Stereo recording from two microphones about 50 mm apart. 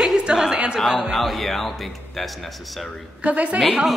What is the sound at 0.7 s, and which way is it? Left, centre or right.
Speech, centre.